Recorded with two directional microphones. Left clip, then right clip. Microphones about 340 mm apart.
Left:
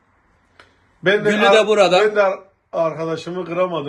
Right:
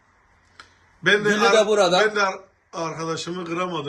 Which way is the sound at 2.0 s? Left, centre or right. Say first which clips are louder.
Left 5 dB; centre.